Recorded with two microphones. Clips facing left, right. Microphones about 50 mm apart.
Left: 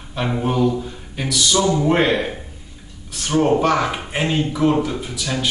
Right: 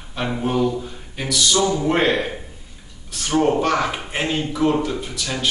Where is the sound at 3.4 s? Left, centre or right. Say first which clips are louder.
Left 2 dB; centre.